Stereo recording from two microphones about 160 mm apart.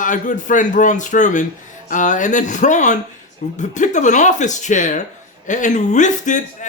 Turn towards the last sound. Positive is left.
turn(degrees=50)  # may be behind; listen again after turning